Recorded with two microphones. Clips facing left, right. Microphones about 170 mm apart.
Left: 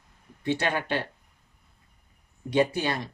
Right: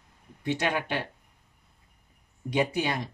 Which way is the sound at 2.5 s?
15° right (ahead or behind).